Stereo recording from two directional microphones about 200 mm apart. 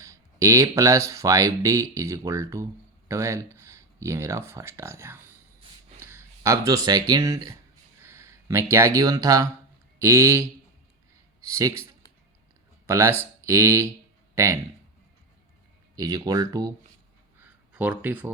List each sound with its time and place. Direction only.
0.0 s speech: 15° right (ahead or behind)
8.0 s a sound: 15° right (ahead or behind)
8.7 s speech: 15° right (ahead or behind)
11.4 s speech: 15° right (ahead or behind)
12.9 s speech: 15° right (ahead or behind)
16.0 s speech: 20° right (ahead or behind)
17.4 s a sound: 5° right (ahead or behind)